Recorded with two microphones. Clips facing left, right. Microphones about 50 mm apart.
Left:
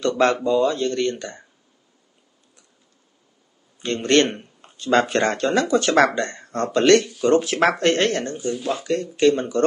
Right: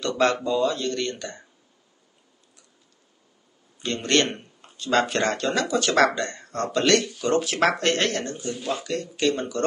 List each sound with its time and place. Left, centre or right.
0.2 s speech: left
3.8 s speech: left
8.5 s speech: centre
8.8 s speech: left